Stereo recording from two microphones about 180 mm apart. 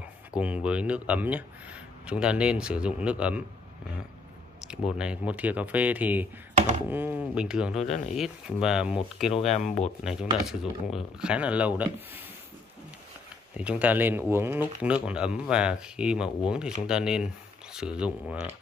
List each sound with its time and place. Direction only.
0.4 s speech: 5° right (ahead or behind)
4.6 s speech: 5° right (ahead or behind)
9.3 s speech: 35° left (ahead or behind)
10.0 s speech: 5° right (ahead or behind)
13.6 s speech: 5° right (ahead or behind)